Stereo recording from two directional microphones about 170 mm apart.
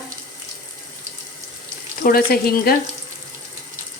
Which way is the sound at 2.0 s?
60° left (ahead or behind).